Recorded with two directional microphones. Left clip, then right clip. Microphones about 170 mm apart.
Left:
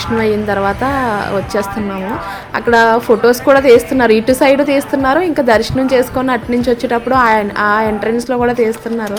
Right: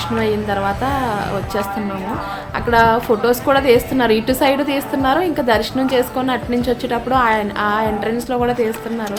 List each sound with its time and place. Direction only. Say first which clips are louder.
0.2 s speech: left 5 dB; 35° left (ahead or behind)
2.6 s a woman's voice: left 4 dB; 30° left (ahead or behind)